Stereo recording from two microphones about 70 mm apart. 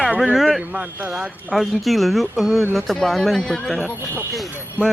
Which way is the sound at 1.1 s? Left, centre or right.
Centre.